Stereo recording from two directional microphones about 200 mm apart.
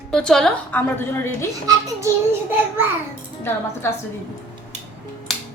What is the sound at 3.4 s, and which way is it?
Speech, 10° left (ahead or behind).